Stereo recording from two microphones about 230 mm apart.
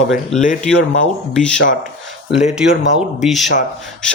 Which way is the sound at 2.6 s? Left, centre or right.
Centre.